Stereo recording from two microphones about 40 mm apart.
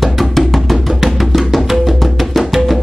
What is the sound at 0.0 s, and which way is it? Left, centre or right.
Music, centre.